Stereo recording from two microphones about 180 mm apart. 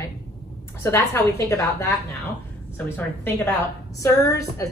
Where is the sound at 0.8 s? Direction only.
15° left (ahead or behind).